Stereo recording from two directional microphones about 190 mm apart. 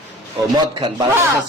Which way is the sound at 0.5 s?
25° right (ahead or behind).